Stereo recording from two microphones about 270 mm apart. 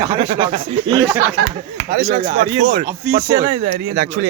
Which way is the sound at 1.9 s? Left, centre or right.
Right.